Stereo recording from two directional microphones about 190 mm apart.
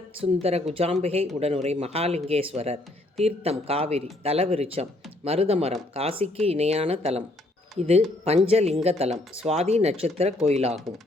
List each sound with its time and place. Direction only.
0.4 s speech: 30° right (ahead or behind)